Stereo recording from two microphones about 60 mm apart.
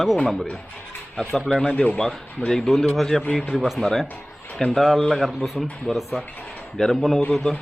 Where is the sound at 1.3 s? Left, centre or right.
Centre.